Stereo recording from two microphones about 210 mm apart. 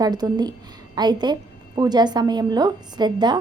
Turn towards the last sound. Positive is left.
turn(degrees=-20)  # may be behind; listen again after turning